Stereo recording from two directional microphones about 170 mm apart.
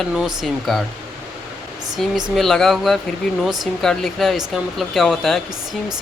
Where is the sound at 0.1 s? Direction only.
5° right (ahead or behind).